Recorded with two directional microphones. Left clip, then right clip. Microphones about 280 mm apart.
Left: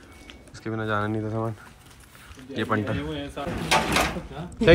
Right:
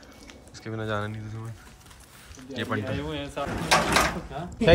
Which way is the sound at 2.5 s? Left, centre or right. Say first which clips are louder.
Left 4 dB; centre.